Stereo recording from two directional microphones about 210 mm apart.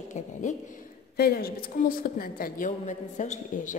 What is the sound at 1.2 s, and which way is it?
A woman's voice, 45° left (ahead or behind).